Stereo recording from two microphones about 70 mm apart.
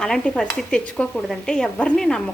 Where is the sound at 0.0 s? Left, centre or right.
Centre.